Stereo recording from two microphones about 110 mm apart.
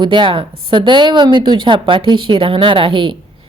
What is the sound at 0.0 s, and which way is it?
Speech, 45° right (ahead or behind).